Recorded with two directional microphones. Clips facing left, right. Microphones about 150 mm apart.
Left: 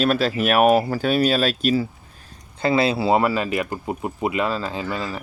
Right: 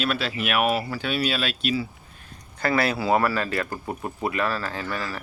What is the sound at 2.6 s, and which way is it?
Speech, 25° left (ahead or behind).